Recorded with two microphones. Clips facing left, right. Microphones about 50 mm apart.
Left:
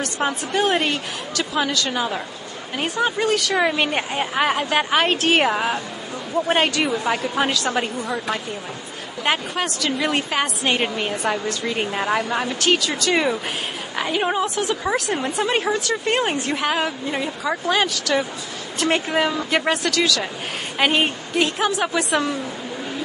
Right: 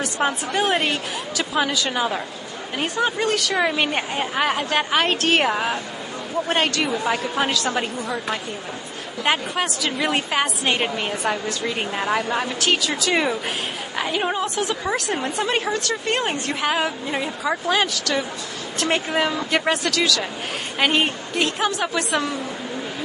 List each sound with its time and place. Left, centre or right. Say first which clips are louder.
0.0 s a woman's voice: right 1 dB; centre